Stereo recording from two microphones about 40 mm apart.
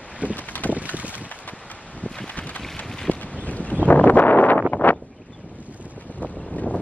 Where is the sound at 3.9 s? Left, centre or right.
Left.